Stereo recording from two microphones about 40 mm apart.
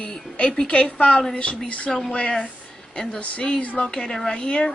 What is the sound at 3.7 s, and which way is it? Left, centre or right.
Speech, centre.